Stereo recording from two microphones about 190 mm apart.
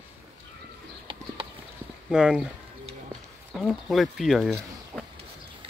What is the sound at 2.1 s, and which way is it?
Speech, 5° right (ahead or behind).